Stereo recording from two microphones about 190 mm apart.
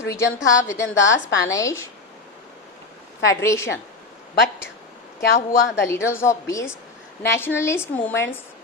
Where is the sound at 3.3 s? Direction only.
15° left (ahead or behind).